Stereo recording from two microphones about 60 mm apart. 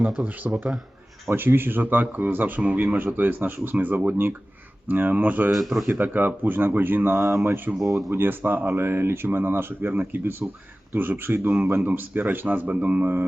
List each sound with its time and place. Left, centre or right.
0.3 s speech: right
1.3 s speech: right
3.1 s speech: right
5.5 s a man's voice: centre
5.9 s speech: right
7.8 s a man's voice: centre
8.1 s speech: right
11.3 s speech: right
11.9 s speech: right